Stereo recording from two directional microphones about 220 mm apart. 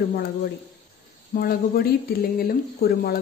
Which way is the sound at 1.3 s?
40° left (ahead or behind).